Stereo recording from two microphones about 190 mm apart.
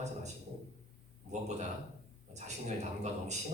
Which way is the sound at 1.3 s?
35° right (ahead or behind).